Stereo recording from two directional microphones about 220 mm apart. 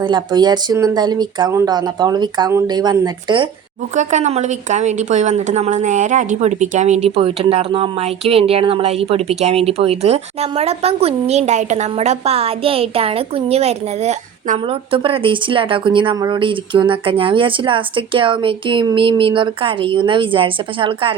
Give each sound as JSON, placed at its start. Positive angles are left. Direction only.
{"t": 0.0, "sound": "speech", "side_deg": -20}
{"t": 3.9, "sound": "speech", "side_deg": -35}